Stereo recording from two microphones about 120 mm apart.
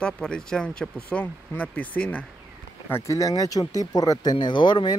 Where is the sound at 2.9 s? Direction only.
25° left (ahead or behind).